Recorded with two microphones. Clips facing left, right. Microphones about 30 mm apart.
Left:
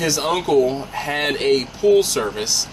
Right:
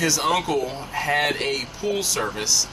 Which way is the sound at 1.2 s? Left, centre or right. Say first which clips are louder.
Left 5 dB; centre.